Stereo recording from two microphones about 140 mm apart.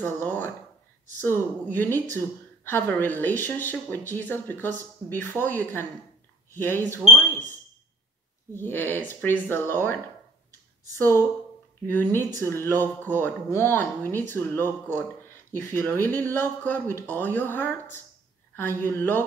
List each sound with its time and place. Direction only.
0.0 s speech: 15° left (ahead or behind)
8.5 s speech: 15° left (ahead or behind)
11.0 s speech: 15° left (ahead or behind)